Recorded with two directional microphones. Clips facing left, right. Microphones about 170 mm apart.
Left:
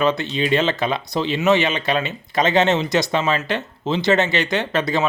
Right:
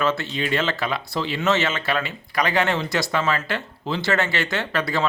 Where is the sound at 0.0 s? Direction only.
20° left (ahead or behind).